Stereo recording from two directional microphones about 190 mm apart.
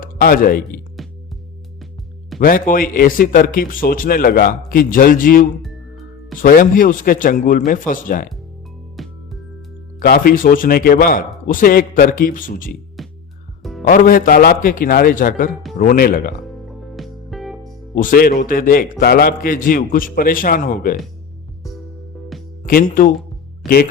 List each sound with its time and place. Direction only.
0.0 s speech: 50° left (ahead or behind)
1.0 s music: centre (ahead or behind)
2.4 s a man's voice: 50° left (ahead or behind)
9.0 s music: centre (ahead or behind)
10.0 s a man's voice: 50° left (ahead or behind)
13.0 s music: centre (ahead or behind)
13.8 s a man's voice: 45° left (ahead or behind)
16.5 s music: centre (ahead or behind)
17.9 s a man's voice: 50° left (ahead or behind)
22.6 s speech: 50° left (ahead or behind)